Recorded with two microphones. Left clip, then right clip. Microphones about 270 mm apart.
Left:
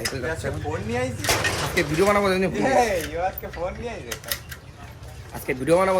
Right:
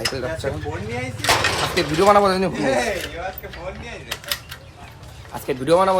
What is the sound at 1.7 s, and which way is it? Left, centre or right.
Speech, centre.